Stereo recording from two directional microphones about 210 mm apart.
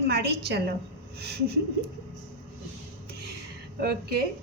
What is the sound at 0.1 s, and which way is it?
Speech, 50° right (ahead or behind).